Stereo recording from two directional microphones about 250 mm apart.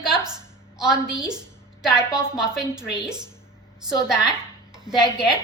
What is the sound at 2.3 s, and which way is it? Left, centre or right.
Speech, centre.